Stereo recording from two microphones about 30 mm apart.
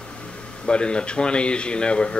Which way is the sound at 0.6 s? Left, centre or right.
Left.